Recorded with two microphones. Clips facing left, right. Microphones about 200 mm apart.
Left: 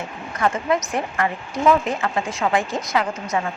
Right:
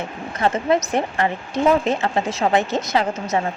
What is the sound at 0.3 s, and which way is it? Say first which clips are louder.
A woman's voice: right 2 dB; 25° right (ahead or behind).